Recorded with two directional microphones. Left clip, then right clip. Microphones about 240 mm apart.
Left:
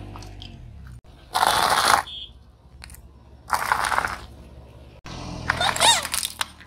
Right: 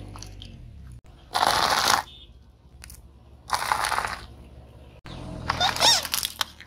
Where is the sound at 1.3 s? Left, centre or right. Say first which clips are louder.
Left 2 dB; centre.